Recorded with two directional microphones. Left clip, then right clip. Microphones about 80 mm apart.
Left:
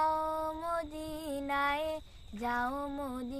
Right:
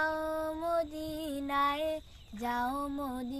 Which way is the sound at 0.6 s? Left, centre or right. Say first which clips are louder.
Right 4 dB; left.